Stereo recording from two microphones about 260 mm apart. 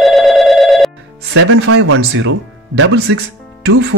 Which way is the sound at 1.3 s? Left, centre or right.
Right.